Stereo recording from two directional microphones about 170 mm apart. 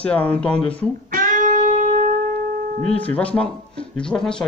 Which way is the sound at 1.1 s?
50° right (ahead or behind).